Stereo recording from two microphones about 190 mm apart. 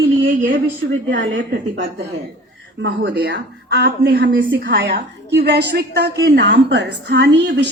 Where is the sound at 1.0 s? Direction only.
65° right (ahead or behind).